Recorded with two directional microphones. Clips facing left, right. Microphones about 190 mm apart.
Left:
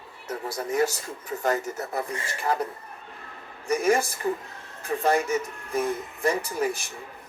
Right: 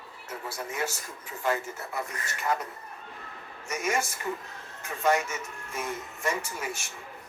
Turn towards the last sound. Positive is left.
turn(degrees=35)  # may be behind; listen again after turning